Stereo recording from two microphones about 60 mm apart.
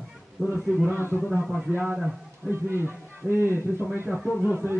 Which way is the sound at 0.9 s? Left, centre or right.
Right.